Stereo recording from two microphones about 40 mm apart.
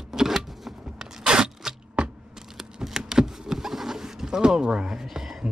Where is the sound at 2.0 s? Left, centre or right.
Right.